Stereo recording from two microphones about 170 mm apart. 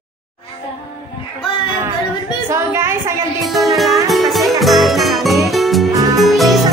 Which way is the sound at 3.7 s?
Centre (ahead or behind).